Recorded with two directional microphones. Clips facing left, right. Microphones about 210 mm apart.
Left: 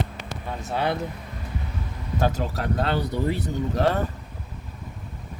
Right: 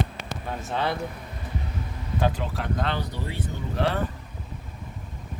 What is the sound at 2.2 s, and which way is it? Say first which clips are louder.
Speech: left 2 dB; 40° left (ahead or behind).